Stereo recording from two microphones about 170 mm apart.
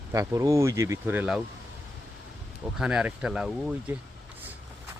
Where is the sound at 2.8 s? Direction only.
5° right (ahead or behind).